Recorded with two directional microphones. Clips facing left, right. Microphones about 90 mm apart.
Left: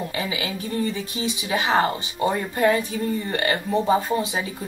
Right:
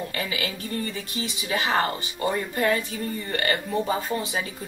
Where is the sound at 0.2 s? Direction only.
15° left (ahead or behind).